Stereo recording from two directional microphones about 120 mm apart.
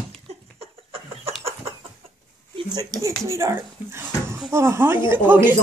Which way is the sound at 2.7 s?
30° right (ahead or behind).